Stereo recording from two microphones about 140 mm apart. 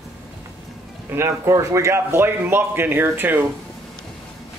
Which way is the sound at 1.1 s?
20° right (ahead or behind).